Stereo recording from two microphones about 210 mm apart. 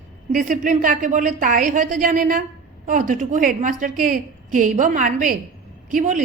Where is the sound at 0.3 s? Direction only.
40° right (ahead or behind).